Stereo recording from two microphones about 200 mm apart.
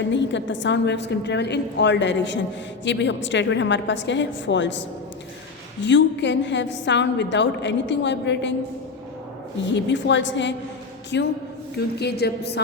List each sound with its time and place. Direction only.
0.1 s a woman's voice: 65° left (ahead or behind)
5.8 s a woman's voice: 60° left (ahead or behind)
9.6 s a woman's voice: 65° left (ahead or behind)